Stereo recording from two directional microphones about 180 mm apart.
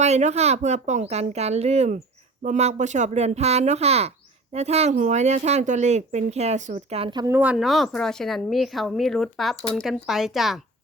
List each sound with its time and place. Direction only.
0.0 s speech: 40° right (ahead or behind); by 7.3 s 25° right (ahead or behind)
7.3 s speech: 5° right (ahead or behind)